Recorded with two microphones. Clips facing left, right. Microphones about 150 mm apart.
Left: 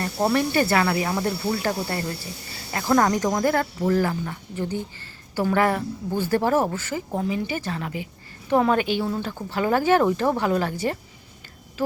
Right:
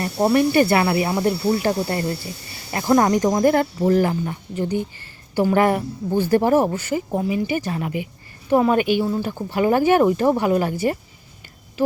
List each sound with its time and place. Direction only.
0.0 s speech: 15° right (ahead or behind)